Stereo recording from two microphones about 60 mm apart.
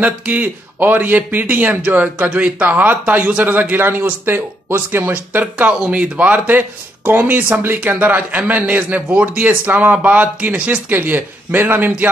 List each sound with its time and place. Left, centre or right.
0.0 s a man's voice: right